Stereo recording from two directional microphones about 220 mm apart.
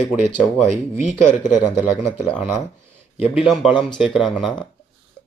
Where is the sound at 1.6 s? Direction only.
5° right (ahead or behind).